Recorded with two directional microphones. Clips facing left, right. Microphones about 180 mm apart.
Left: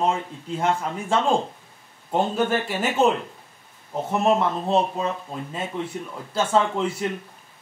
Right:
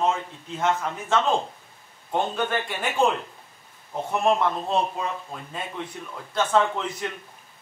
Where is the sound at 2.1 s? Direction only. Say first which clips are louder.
Left 3 dB; 5° left (ahead or behind).